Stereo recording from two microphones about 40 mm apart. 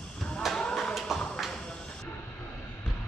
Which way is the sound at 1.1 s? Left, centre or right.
Centre.